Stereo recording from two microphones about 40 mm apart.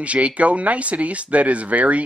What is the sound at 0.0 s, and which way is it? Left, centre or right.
Speech, right.